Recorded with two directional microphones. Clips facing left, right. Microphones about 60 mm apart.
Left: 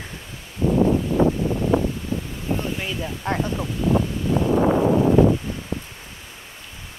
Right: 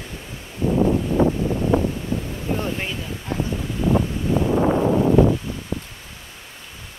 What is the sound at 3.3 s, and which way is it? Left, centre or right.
Speech, left.